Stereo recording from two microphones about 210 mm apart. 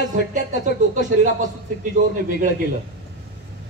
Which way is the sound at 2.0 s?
35° right (ahead or behind).